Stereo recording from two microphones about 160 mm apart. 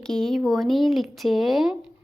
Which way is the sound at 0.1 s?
Centre (ahead or behind).